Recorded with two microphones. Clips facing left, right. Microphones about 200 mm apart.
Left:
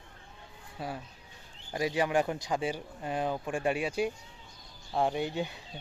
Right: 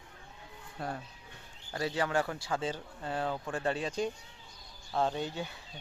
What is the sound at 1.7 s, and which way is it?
Speech, 15° left (ahead or behind).